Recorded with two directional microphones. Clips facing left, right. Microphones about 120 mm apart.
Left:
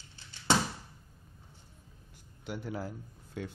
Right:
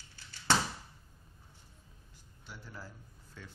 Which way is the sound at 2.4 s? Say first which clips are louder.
Left 11 dB; 65° left (ahead or behind).